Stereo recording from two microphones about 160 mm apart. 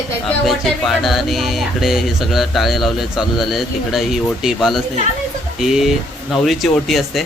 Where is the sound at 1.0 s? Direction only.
Centre (ahead or behind).